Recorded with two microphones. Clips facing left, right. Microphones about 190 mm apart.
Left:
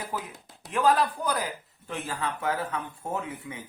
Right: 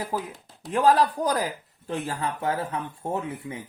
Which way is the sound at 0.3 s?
5° left (ahead or behind).